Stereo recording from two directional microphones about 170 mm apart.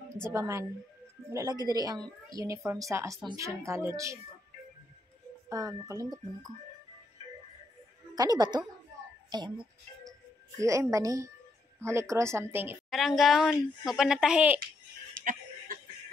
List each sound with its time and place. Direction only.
0.2 s a woman's voice: 15° right (ahead or behind)
5.5 s speech: 20° right (ahead or behind)
8.1 s a woman's voice: 25° right (ahead or behind)
12.9 s speech: centre (ahead or behind)